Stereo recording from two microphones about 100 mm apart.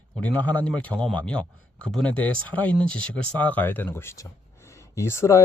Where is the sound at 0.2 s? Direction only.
15° left (ahead or behind).